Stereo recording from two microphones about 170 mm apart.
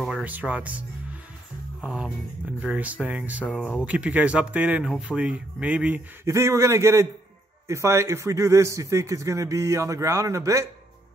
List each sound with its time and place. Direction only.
0.0 s speech: 5° right (ahead or behind)
3.4 s speech: 10° left (ahead or behind)
3.8 s speech: 10° right (ahead or behind)